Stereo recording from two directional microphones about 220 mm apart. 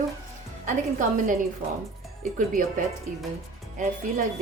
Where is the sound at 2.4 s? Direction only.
35° right (ahead or behind).